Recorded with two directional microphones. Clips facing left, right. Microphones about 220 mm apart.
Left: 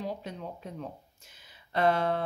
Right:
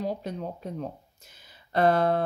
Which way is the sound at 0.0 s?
40° right (ahead or behind).